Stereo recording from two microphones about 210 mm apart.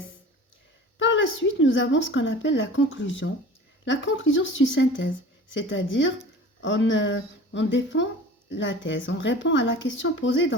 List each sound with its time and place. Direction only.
0.9 s a woman's voice: 60° left (ahead or behind)